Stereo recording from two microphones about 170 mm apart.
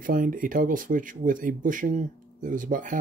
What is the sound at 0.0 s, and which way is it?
Speech, 55° right (ahead or behind).